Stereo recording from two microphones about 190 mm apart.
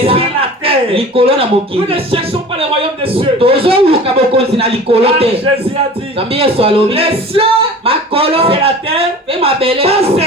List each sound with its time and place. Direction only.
0.0 s speech: 30° right (ahead or behind)